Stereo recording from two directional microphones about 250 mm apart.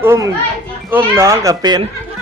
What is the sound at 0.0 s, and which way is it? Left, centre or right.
A child's voice, centre.